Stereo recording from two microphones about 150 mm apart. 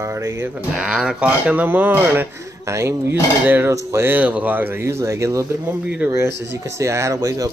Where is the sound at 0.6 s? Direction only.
5° right (ahead or behind).